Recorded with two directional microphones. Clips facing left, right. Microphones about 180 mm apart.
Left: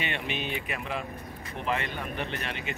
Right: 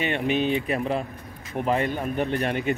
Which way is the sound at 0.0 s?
40° right (ahead or behind).